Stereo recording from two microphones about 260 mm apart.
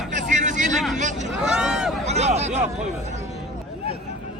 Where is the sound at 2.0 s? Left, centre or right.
Right.